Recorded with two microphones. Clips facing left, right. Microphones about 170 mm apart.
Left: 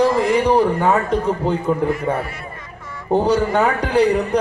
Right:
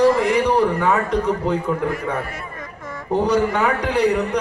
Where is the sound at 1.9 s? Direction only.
45° right (ahead or behind).